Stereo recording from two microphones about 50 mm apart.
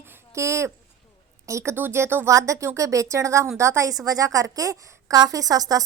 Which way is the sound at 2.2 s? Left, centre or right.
Right.